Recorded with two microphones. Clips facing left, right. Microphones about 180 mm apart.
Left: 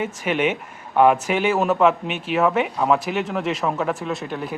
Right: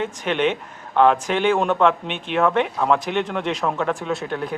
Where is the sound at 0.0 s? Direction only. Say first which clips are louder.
Even; 5° left (ahead or behind).